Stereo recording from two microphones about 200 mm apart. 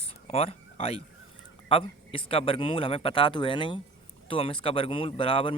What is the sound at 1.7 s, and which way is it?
A man's voice, 25° left (ahead or behind).